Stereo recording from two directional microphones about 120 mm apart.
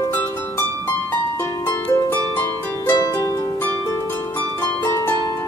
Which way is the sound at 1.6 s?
30° left (ahead or behind).